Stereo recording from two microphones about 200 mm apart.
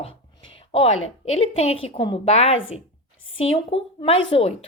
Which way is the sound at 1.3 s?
30° left (ahead or behind).